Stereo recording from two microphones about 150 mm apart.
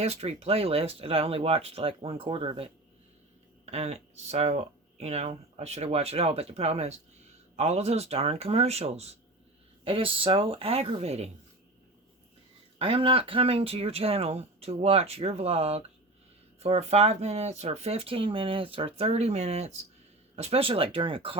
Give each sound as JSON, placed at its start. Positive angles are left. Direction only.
{"t": 0.0, "sound": "speech", "side_deg": -45}
{"t": 12.8, "sound": "speech", "side_deg": -35}